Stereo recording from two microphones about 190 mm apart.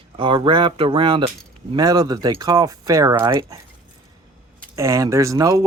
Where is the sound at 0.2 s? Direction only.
25° right (ahead or behind).